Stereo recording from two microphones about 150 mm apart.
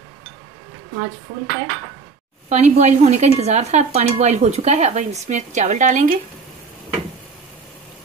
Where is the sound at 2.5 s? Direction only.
45° right (ahead or behind).